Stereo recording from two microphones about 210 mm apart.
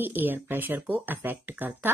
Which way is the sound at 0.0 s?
10° right (ahead or behind).